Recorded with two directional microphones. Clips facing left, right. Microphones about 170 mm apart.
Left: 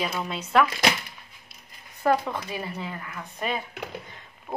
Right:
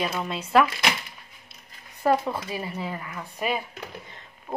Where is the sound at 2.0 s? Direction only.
10° right (ahead or behind).